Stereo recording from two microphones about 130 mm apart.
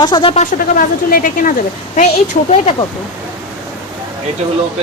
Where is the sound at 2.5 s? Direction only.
45° left (ahead or behind).